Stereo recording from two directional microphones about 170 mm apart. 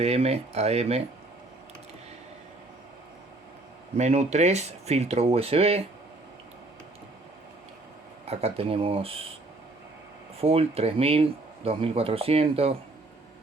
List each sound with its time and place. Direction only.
0.0 s speech: 40° right (ahead or behind)
3.9 s speech: 40° right (ahead or behind)
8.2 s speech: 40° right (ahead or behind)
10.4 s speech: 35° right (ahead or behind)